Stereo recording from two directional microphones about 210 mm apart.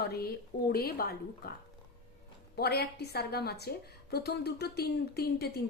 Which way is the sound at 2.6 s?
50° left (ahead or behind).